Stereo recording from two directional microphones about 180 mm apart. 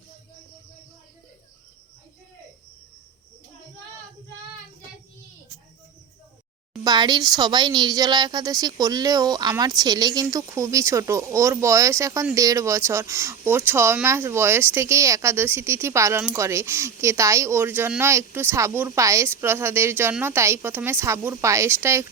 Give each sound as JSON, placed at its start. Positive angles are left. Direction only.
{"t": 6.8, "sound": "speech", "side_deg": -25}